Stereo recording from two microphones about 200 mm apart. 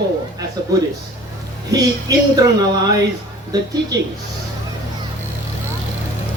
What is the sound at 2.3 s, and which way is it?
A man's voice, 20° right (ahead or behind).